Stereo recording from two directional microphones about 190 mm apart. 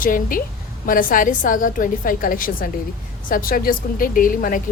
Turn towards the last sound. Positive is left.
turn(degrees=45)  # may be behind; listen again after turning